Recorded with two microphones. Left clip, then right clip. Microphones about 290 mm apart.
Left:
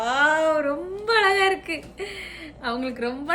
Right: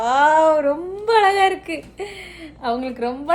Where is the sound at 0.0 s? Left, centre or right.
Centre.